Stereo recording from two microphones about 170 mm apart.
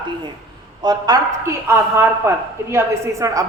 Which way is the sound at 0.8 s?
25° right (ahead or behind).